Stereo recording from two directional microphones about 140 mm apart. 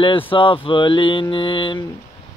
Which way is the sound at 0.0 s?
35° left (ahead or behind).